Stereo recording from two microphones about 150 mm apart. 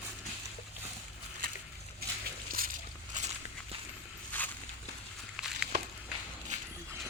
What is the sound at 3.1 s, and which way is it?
Walk, 55° right (ahead or behind).